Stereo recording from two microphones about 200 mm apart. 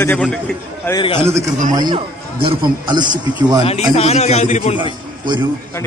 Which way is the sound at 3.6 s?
30° left (ahead or behind).